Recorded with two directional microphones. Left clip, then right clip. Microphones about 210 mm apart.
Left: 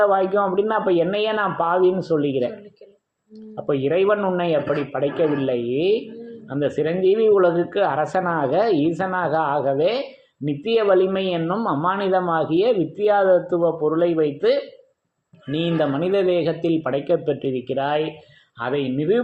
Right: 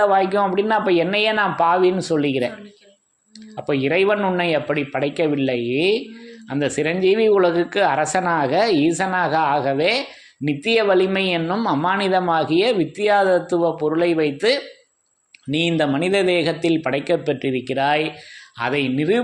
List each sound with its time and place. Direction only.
0.2 s speech: 20° right (ahead or behind)
3.7 s speech: 20° right (ahead or behind)